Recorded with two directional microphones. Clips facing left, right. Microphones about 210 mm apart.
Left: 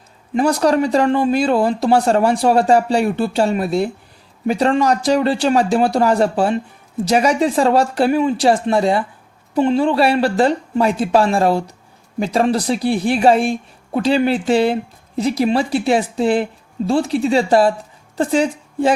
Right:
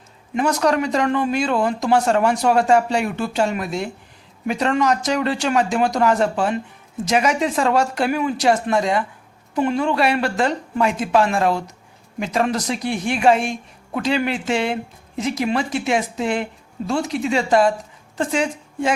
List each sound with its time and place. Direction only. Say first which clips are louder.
0.3 s a woman's voice: left 4 dB; 35° left (ahead or behind)